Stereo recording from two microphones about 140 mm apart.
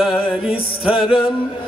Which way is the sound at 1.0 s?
40° left (ahead or behind).